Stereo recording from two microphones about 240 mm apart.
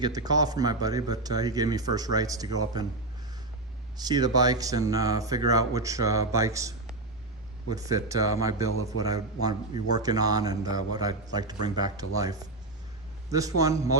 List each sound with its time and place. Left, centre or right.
0.0 s speech: centre
3.9 s speech: centre